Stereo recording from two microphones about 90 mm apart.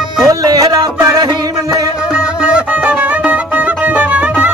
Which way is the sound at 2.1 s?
10° right (ahead or behind).